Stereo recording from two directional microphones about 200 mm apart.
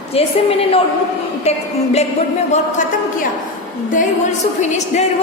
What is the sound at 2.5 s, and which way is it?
Speech, 40° left (ahead or behind).